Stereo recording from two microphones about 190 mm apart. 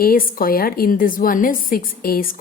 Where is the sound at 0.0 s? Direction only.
50° left (ahead or behind).